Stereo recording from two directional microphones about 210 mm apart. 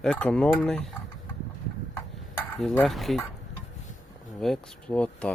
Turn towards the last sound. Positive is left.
turn(degrees=5)  # may be behind; listen again after turning